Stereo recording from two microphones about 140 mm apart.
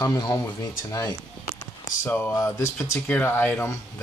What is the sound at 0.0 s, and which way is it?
Speech, 30° left (ahead or behind).